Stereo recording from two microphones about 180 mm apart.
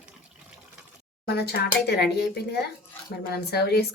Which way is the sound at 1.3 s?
65° left (ahead or behind).